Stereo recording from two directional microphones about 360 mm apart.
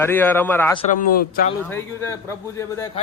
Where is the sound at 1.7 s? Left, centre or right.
Centre.